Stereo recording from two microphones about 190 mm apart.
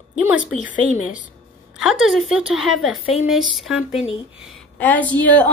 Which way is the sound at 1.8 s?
Centre (ahead or behind).